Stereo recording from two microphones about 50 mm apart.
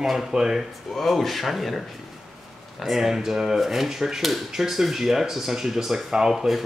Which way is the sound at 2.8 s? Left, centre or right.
Centre.